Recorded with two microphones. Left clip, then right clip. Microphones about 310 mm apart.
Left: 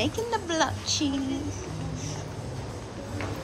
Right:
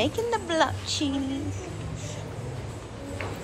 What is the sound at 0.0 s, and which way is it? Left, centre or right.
A woman's voice, centre.